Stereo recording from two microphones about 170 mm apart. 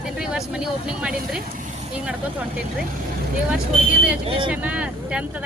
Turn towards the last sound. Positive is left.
turn(degrees=-5)  # may be behind; listen again after turning